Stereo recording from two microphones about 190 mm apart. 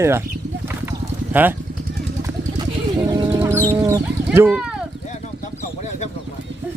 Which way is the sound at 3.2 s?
20° right (ahead or behind).